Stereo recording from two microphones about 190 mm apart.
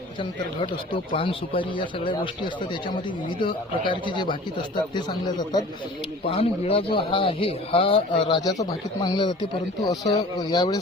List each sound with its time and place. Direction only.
1.1 s a man's voice: 30° left (ahead or behind)
6.3 s a man's voice: 30° left (ahead or behind)